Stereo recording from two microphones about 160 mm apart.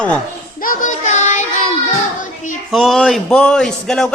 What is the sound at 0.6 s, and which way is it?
Child singing, 55° left (ahead or behind).